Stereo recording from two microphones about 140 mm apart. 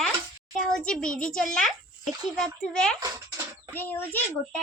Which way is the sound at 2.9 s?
25° right (ahead or behind).